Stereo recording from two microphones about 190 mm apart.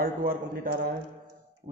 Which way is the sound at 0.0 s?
50° right (ahead or behind).